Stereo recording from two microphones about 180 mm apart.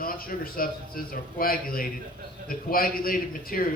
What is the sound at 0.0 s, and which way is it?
A man's voice, 55° left (ahead or behind).